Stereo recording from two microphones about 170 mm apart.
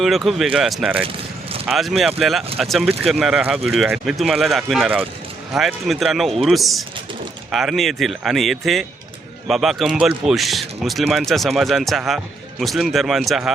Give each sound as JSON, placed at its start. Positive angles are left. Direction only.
{"t": 0.0, "sound": "speech", "side_deg": 0}
{"t": 1.0, "sound": "a sound", "side_deg": -35}
{"t": 1.6, "sound": "speech", "side_deg": 0}